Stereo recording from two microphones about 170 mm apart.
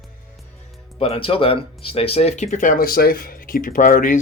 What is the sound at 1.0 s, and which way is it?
Speech, 35° left (ahead or behind).